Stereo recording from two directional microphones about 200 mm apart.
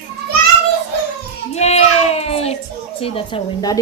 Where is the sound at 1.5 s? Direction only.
35° left (ahead or behind).